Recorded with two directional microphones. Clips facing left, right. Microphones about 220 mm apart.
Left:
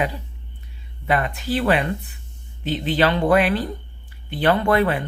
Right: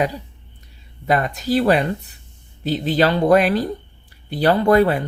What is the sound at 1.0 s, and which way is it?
Speech, 40° right (ahead or behind).